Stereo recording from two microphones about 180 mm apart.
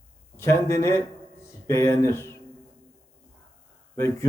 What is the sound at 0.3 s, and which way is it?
A man's voice, 15° left (ahead or behind).